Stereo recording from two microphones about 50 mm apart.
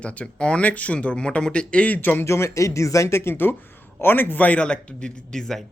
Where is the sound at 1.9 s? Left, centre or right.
Left.